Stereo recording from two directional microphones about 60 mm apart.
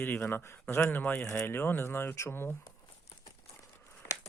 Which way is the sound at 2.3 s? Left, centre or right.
Left.